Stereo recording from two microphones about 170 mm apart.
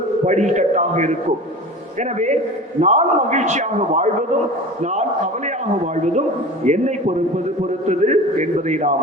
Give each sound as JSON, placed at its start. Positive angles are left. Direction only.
{"t": 0.3, "sound": "a man's voice", "side_deg": -45}